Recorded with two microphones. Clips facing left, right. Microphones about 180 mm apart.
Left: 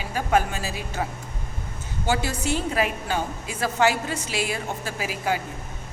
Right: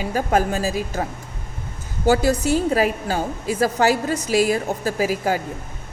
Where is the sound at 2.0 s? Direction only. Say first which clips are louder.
Right 8 dB; 40° right (ahead or behind).